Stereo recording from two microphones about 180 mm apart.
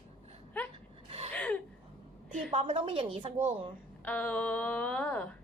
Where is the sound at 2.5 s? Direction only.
30° right (ahead or behind).